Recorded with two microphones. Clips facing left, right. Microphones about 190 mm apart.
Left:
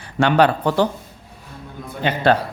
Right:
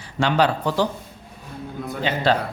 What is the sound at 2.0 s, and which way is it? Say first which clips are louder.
Speech: left 4 dB; 55° left (ahead or behind).